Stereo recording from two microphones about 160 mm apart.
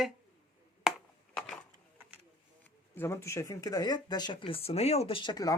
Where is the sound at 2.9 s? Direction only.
15° left (ahead or behind).